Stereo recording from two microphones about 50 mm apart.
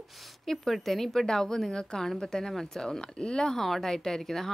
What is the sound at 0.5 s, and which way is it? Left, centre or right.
A woman's voice, centre.